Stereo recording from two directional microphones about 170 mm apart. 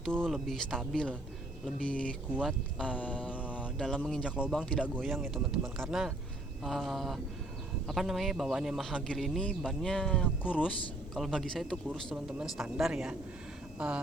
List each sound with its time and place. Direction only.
0.3 s speech: centre (ahead or behind)